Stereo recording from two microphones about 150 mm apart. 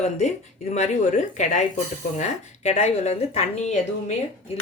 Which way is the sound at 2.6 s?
45° left (ahead or behind).